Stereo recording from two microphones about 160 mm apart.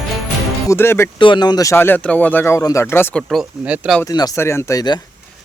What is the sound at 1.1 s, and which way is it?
Speech, 30° left (ahead or behind).